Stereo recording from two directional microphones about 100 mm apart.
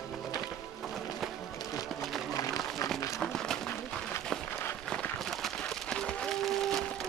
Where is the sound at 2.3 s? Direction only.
35° left (ahead or behind).